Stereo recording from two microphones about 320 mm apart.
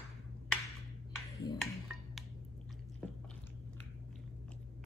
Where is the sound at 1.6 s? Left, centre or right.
Centre.